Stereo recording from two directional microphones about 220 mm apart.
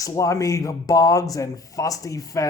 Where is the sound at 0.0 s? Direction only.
15° left (ahead or behind).